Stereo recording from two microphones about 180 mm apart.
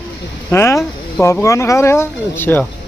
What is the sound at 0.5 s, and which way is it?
Speech, 15° left (ahead or behind).